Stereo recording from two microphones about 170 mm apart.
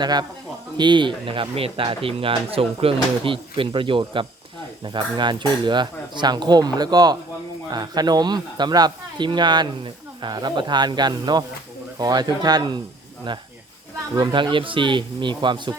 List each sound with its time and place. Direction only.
0.0 s speech: 25° right (ahead or behind)
14.2 s speech: 25° right (ahead or behind)